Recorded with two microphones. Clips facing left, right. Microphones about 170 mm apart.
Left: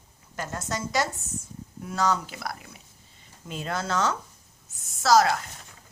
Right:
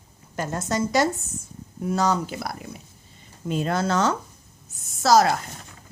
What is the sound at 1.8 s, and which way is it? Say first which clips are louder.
Speech: right 4 dB; 30° right (ahead or behind).